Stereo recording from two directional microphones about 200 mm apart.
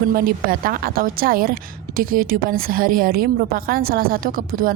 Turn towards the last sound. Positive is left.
turn(degrees=-45)  # may be behind; listen again after turning